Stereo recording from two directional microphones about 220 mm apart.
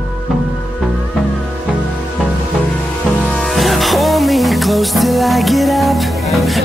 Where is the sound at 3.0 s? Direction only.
Centre (ahead or behind).